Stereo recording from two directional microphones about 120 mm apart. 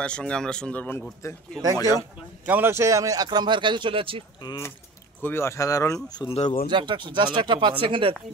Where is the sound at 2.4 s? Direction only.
15° right (ahead or behind); by 4.2 s 50° right (ahead or behind).